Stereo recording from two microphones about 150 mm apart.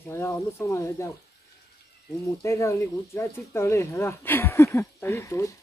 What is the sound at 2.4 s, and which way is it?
Speech, 20° left (ahead or behind).